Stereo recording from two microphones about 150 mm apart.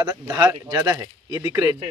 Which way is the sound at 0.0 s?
20° right (ahead or behind).